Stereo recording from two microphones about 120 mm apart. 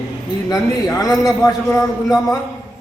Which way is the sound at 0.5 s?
30° left (ahead or behind).